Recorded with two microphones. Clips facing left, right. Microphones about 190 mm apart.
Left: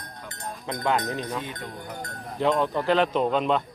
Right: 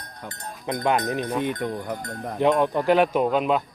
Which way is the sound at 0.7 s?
15° right (ahead or behind).